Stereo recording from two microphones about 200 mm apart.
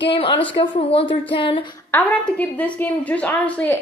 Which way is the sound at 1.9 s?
10° left (ahead or behind).